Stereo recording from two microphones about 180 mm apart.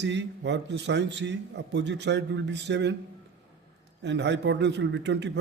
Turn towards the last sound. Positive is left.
turn(degrees=-75)  # may be behind; listen again after turning